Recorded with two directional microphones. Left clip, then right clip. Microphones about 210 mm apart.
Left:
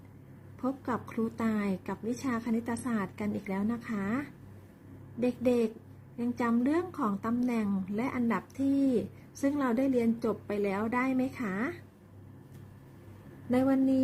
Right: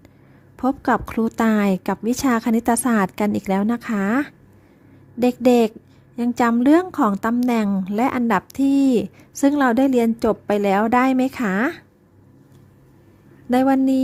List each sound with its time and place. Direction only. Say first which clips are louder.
0.5 s a woman's voice: right 14 dB; 50° right (ahead or behind)
13.5 s a woman's voice: right 10 dB; 50° right (ahead or behind)